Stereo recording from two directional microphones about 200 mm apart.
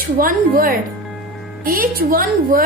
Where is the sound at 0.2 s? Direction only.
45° right (ahead or behind).